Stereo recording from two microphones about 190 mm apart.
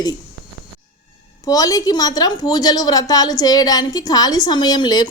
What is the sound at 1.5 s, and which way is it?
A woman's voice, 20° left (ahead or behind).